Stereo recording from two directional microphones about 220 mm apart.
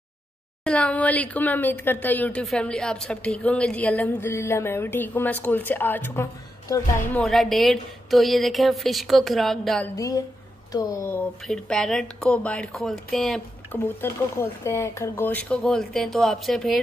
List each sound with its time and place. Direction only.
0.7 s a woman's voice: 5° left (ahead or behind)
7.2 s speech: centre (ahead or behind)
9.9 s a woman's voice: 15° left (ahead or behind)